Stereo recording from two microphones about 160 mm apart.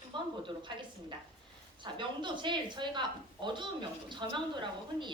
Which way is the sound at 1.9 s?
30° right (ahead or behind).